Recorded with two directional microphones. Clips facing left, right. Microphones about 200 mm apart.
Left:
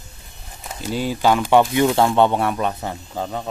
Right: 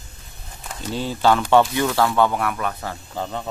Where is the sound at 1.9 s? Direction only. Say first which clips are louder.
Left 3 dB; 25° left (ahead or behind).